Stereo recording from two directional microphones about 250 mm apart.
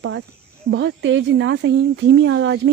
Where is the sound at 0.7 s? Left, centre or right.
Right.